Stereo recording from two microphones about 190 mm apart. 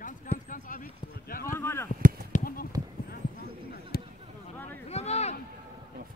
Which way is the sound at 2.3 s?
50° left (ahead or behind).